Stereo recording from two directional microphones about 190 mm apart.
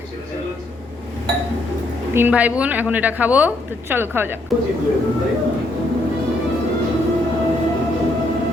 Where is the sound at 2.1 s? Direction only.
10° right (ahead or behind).